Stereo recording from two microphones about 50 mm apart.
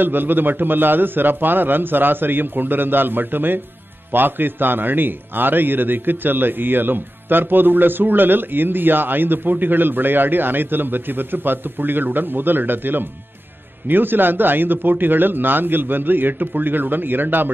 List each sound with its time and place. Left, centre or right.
0.0 s a man's voice: right